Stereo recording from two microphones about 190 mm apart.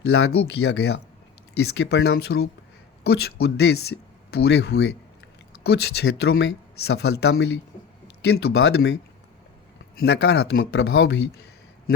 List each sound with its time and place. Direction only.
0.0 s speech: 65° left (ahead or behind)